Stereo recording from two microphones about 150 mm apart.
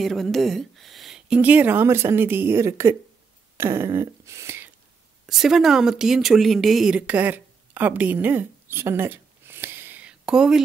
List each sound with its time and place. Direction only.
0.0 s speech: centre (ahead or behind); by 3.0 s 20° right (ahead or behind)
3.5 s a sound: 15° right (ahead or behind)
5.2 s speech: centre (ahead or behind)